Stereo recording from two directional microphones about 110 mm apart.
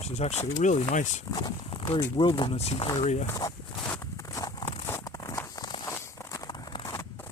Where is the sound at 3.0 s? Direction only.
90° left.